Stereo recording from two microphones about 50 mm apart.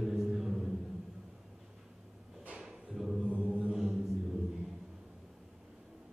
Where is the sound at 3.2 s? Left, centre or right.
Centre.